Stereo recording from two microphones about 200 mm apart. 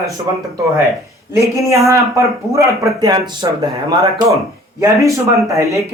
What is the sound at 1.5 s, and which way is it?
A man's voice, 15° right (ahead or behind).